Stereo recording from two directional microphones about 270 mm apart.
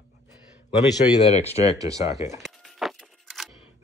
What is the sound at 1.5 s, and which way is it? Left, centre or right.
Speech, left.